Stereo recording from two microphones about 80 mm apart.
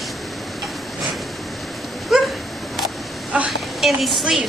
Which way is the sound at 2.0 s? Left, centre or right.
Centre.